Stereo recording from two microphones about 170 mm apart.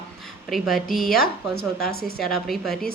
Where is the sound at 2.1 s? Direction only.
Centre (ahead or behind).